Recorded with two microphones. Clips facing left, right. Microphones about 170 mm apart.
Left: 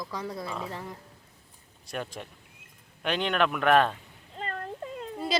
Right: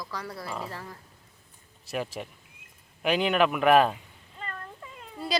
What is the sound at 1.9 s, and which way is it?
Speech, 5° right (ahead or behind).